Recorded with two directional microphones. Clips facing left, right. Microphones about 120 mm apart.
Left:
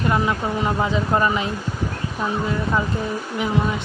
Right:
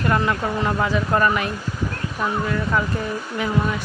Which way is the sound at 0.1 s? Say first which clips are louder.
Right 2 dB; 15° left (ahead or behind).